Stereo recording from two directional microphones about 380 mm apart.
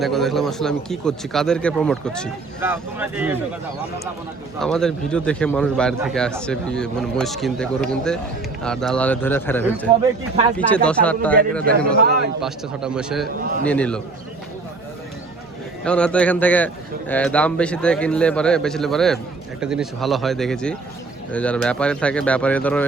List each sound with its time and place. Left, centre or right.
0.0 s a man's voice: centre
4.6 s a man's voice: centre
10.8 s a man's voice: centre
11.6 s a man's voice: right
12.4 s a man's voice: centre
13.4 s a man's voice: right
13.7 s a man's voice: centre
15.8 s a man's voice: centre